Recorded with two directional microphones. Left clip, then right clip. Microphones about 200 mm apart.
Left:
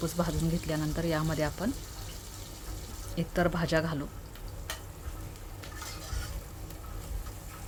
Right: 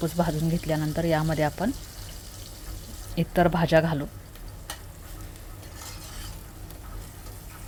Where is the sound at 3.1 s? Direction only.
15° right (ahead or behind).